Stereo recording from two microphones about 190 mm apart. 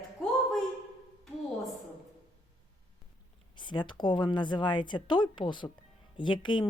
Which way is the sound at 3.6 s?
25° left (ahead or behind).